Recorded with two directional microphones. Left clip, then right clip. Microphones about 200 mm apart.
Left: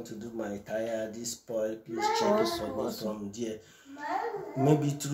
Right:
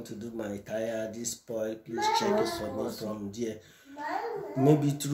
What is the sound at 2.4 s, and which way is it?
Speech, 30° left (ahead or behind).